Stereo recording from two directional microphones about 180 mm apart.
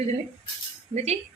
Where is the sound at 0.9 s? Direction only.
40° right (ahead or behind).